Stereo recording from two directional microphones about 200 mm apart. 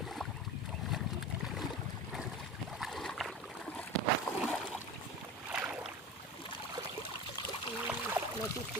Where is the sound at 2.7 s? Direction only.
Centre (ahead or behind).